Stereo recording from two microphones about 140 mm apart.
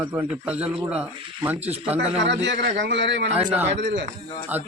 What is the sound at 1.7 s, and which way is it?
Speech, 50° right (ahead or behind).